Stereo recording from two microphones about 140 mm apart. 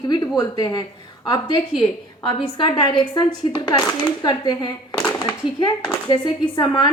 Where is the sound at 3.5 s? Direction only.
30° left (ahead or behind).